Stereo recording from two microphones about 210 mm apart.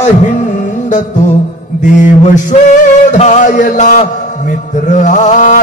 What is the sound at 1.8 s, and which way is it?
Mantra, 35° left (ahead or behind).